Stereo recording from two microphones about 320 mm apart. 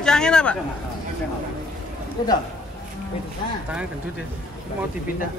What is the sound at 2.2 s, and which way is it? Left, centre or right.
Speech, centre.